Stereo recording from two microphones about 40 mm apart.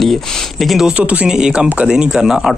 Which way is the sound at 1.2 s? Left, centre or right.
Centre.